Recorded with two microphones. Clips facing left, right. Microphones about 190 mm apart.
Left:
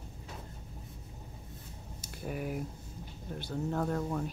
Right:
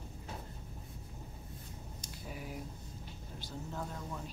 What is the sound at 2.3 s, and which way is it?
Speech, 60° left (ahead or behind).